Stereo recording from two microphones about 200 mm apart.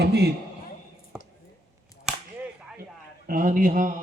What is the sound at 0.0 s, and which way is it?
Speech, 55° right (ahead or behind).